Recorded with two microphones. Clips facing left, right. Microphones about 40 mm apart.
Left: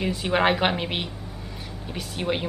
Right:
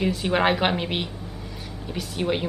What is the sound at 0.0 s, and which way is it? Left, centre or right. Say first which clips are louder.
A woman's voice: right 1 dB; centre.